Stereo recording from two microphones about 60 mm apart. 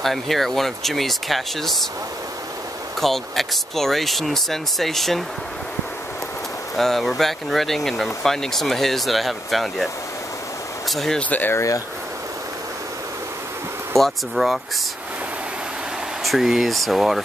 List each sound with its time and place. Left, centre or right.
0.0 s speech: centre
3.0 s speech: centre
6.8 s speech: centre
10.9 s speech: centre
11.1 s speech: left
11.5 s speech: left
13.9 s speech: centre
16.3 s speech: centre